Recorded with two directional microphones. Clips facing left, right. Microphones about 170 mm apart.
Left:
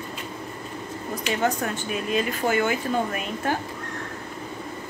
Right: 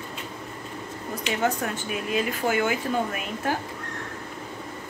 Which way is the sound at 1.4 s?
5° right (ahead or behind).